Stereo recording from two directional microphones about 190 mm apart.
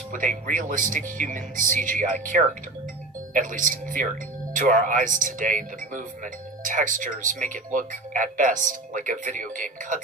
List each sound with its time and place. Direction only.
0.1 s speech: 45° right (ahead or behind)